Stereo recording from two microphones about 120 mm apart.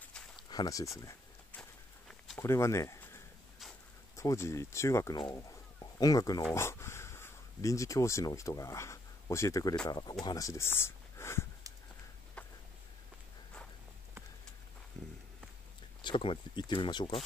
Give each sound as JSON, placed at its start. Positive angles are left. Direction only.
{"t": 0.5, "sound": "speech", "side_deg": 30}
{"t": 1.5, "sound": "walk", "side_deg": 5}
{"t": 2.3, "sound": "speech", "side_deg": 25}
{"t": 4.2, "sound": "speech", "side_deg": 25}
{"t": 5.3, "sound": "a sound", "side_deg": 30}
{"t": 6.5, "sound": "speech", "side_deg": 20}
{"t": 12.4, "sound": "a sound", "side_deg": 10}
{"t": 15.0, "sound": "a sound", "side_deg": 5}
{"t": 16.0, "sound": "speech", "side_deg": 45}